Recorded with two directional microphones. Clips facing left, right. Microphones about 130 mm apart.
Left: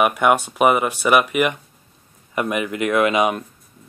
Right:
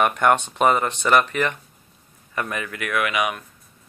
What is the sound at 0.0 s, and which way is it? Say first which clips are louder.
Speech: left 2 dB; 10° left (ahead or behind).